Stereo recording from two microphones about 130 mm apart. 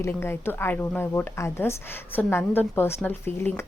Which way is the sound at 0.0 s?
20° left (ahead or behind).